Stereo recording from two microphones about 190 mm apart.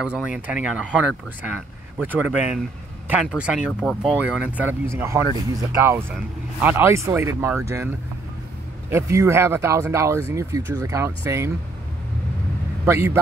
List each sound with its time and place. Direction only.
0.0 s speech: 5° right (ahead or behind)
2.0 s speech: 10° right (ahead or behind)
8.9 s speech: 15° right (ahead or behind)
12.8 s speech: 15° right (ahead or behind)